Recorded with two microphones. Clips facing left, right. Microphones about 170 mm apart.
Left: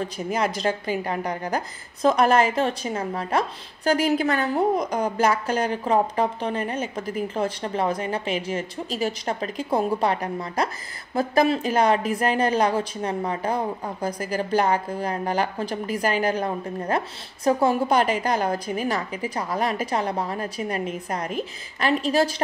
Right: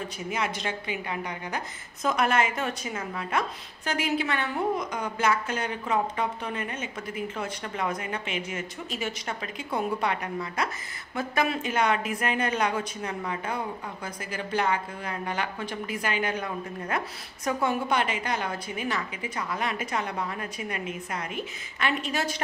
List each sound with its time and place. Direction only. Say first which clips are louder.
0.3 s a woman's voice: left 7 dB; 35° left (ahead or behind)